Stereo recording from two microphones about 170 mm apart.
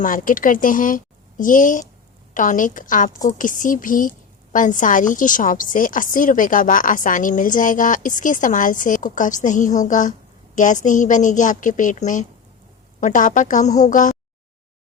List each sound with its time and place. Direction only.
0.0 s a woman's voice: 50° left (ahead or behind)